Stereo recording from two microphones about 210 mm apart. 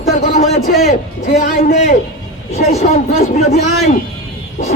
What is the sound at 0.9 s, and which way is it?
Speech, 35° left (ahead or behind).